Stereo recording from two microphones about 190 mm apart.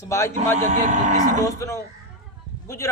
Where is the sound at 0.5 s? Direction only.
40° right (ahead or behind).